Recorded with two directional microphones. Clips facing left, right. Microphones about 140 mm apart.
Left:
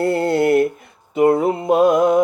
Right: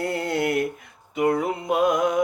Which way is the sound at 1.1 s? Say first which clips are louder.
Left 7 dB; 30° left (ahead or behind).